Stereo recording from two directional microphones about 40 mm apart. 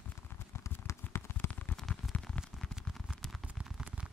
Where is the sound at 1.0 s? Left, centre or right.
Left.